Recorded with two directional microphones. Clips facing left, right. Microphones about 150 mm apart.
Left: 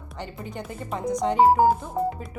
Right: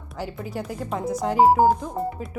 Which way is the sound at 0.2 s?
5° right (ahead or behind).